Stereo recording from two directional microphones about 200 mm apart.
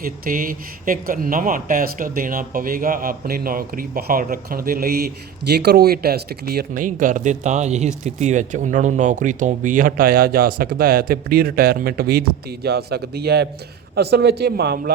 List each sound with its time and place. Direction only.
0.0 s speech: 45° right (ahead or behind)